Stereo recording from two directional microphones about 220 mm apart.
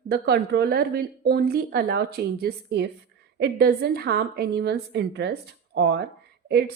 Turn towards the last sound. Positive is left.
turn(degrees=-45)  # may be behind; listen again after turning